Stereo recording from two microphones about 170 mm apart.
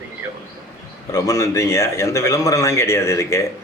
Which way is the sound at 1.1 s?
20° left (ahead or behind).